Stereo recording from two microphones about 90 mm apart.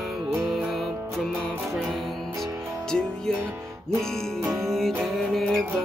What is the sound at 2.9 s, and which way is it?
Music, 5° left (ahead or behind).